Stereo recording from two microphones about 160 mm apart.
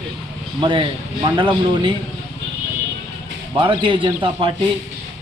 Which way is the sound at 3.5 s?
30° right (ahead or behind).